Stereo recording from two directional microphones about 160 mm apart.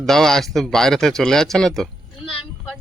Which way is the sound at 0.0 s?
Centre (ahead or behind).